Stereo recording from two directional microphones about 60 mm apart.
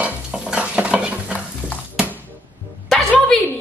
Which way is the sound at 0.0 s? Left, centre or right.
Centre.